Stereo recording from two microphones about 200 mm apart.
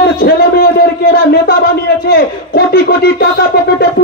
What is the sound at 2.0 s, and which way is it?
A man's voice, 50° left (ahead or behind).